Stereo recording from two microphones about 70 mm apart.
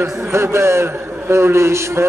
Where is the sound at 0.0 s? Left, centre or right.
Right.